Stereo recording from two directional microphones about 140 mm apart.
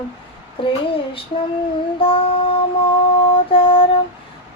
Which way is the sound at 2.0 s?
40° left (ahead or behind).